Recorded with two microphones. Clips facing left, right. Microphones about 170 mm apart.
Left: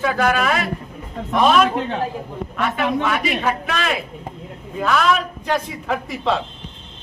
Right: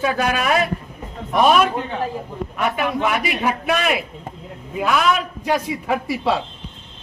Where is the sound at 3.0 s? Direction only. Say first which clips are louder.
Even; 15° right (ahead or behind).